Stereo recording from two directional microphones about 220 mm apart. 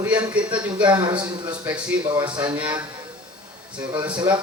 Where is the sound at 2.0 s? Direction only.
20° right (ahead or behind).